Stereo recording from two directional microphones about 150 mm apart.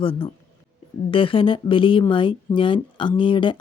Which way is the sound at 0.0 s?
35° left (ahead or behind).